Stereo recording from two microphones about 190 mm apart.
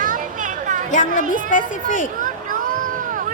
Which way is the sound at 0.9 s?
40° left (ahead or behind).